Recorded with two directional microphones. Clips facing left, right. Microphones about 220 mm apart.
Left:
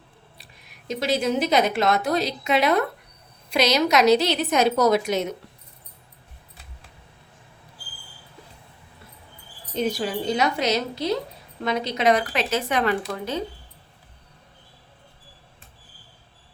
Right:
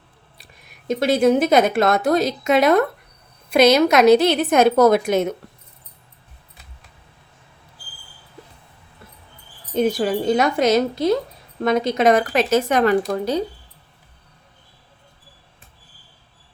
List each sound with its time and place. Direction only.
0.9 s a woman's voice: 50° right (ahead or behind)
9.7 s a woman's voice: 50° right (ahead or behind)